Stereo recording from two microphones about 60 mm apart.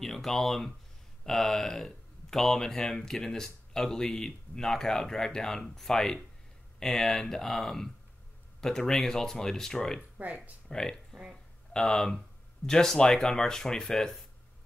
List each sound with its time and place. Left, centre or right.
0.0 s speech: centre
9.9 s speech: right
10.7 s speech: centre